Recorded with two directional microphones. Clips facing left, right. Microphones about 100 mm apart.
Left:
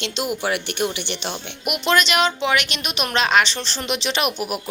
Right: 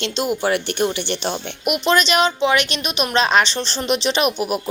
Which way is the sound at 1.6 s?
20° right (ahead or behind).